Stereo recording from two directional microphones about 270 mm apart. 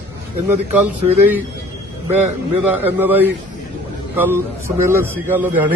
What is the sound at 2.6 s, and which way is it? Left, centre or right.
Speech, centre.